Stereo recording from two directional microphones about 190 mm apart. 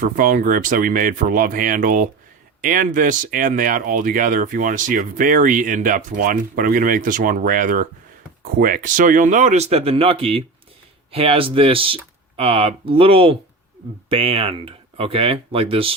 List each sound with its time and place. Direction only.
0.0 s speech: 45° right (ahead or behind); by 16.0 s 30° right (ahead or behind)